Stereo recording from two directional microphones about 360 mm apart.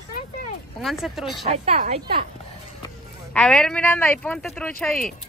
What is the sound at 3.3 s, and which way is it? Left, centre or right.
Speech, centre.